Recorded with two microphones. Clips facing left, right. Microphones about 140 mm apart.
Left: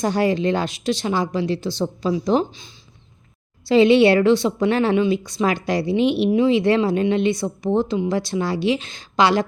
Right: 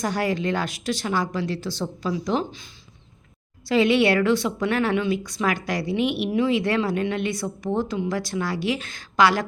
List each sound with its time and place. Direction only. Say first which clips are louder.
0.0 s a woman's voice: left 5 dB; 25° left (ahead or behind)
3.7 s a woman's voice: left 6 dB; 25° left (ahead or behind)